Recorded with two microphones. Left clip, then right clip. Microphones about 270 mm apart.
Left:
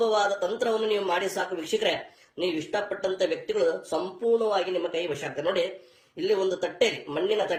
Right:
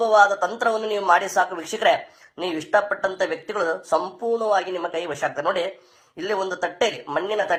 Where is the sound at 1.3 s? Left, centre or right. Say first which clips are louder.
Right 6 dB; right.